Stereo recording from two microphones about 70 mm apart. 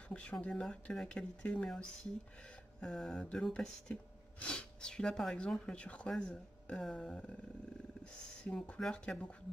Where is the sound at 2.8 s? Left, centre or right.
Centre.